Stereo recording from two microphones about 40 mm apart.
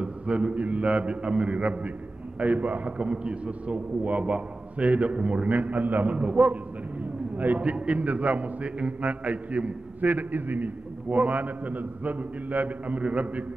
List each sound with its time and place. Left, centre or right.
0.0 s mantra: right
0.6 s a man's voice: right
7.7 s a man's voice: right